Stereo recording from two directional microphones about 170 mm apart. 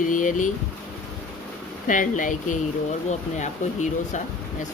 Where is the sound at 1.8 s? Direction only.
50° left (ahead or behind).